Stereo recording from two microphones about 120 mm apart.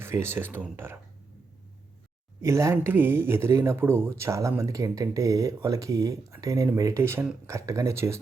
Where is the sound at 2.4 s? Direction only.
25° right (ahead or behind).